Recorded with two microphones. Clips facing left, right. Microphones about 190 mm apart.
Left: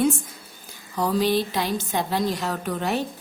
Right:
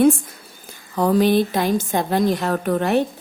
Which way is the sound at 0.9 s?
55° right (ahead or behind).